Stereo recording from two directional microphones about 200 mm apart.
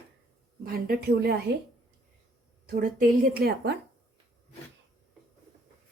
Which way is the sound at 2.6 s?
45° right (ahead or behind).